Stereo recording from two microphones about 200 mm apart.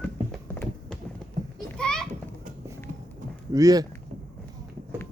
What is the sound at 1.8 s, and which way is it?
Children playing, 5° left (ahead or behind).